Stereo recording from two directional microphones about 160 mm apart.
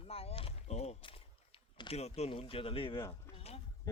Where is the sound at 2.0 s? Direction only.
40° left (ahead or behind).